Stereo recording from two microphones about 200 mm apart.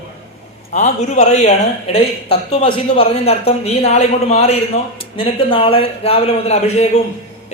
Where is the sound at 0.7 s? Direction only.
35° left (ahead or behind).